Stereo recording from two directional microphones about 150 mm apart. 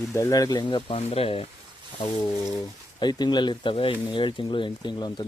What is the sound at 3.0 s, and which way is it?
Speech, 30° left (ahead or behind).